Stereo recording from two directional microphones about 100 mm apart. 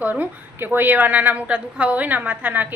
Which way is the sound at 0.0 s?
15° right (ahead or behind).